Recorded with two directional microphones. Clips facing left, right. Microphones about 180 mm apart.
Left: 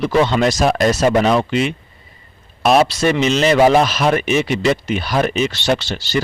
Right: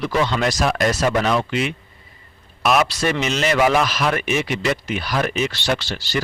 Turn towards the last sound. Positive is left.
turn(degrees=25)  # may be behind; listen again after turning